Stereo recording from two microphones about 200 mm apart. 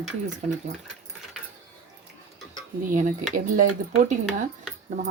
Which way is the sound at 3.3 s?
40° right (ahead or behind).